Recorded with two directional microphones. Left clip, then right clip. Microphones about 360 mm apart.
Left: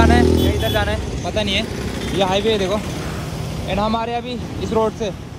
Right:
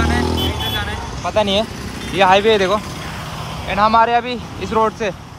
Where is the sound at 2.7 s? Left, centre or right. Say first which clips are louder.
Right 3 dB; centre.